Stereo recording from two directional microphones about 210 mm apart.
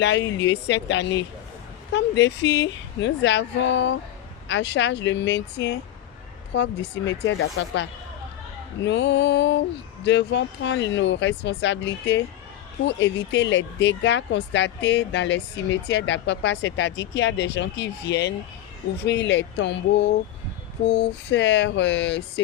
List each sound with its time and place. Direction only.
0.0 s speech: 55° left (ahead or behind)
20.8 s speech: 60° left (ahead or behind)